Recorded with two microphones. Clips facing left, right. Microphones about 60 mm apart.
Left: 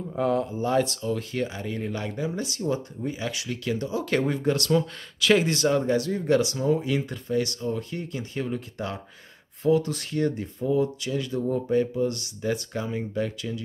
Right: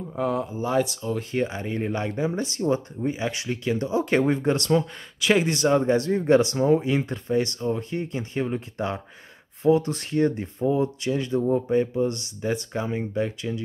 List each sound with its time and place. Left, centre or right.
0.1 s speech: centre
1.3 s speech: right
5.9 s speech: right